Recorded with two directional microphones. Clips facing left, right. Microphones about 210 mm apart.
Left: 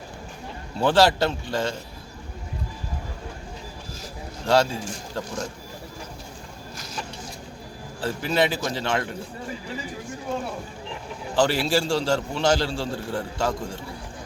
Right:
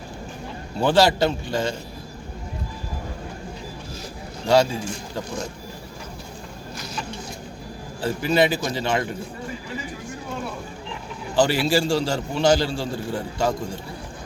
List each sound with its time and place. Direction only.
0.8 s a man's voice: centre (ahead or behind)
4.4 s a man's voice: centre (ahead or behind)
6.7 s vehicle: 45° left (ahead or behind)
8.0 s a man's voice: centre (ahead or behind)
11.3 s a man's voice: centre (ahead or behind)